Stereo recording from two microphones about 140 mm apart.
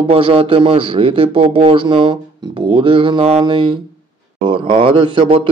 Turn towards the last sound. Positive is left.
turn(degrees=-35)  # may be behind; listen again after turning